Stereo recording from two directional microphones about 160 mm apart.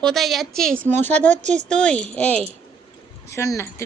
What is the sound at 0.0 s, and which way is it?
Speech, centre (ahead or behind).